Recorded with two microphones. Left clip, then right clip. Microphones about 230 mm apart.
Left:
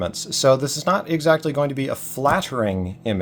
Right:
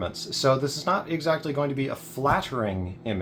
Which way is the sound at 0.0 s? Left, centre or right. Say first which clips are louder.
Left 6 dB; left.